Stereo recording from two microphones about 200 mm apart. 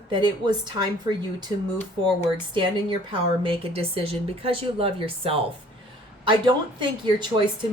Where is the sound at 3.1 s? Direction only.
25° right (ahead or behind).